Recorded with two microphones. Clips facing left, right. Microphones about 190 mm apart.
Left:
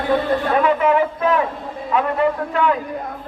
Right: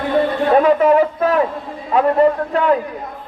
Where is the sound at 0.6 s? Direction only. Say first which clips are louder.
Right 5 dB; 40° right (ahead or behind).